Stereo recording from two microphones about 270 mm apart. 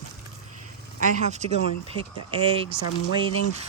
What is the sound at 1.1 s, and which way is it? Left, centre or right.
Speech, right.